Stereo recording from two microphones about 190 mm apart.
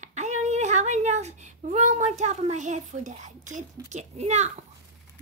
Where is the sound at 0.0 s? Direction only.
40° right (ahead or behind).